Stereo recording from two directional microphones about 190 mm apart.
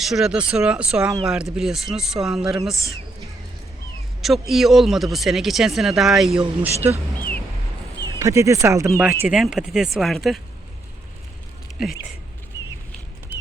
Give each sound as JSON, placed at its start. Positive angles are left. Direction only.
{"t": 0.0, "sound": "speech", "side_deg": 0}
{"t": 4.2, "sound": "speech", "side_deg": 0}
{"t": 8.2, "sound": "speech", "side_deg": -15}
{"t": 9.2, "sound": "speech", "side_deg": -5}